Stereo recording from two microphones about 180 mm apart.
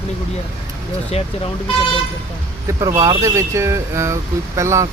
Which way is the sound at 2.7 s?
20° right (ahead or behind).